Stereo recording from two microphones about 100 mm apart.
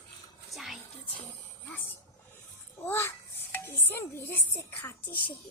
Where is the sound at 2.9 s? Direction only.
25° left (ahead or behind).